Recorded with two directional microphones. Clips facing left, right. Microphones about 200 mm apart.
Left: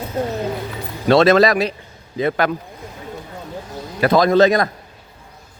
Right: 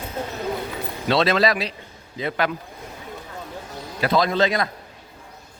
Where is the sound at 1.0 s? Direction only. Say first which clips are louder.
Left 7 dB; 50° left (ahead or behind).